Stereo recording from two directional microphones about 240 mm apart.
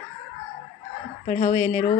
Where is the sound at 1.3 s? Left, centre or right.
Left.